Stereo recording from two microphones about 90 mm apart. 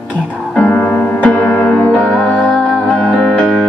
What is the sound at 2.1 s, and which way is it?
Music, centre (ahead or behind).